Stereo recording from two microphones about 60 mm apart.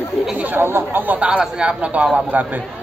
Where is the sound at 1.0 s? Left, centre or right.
Right.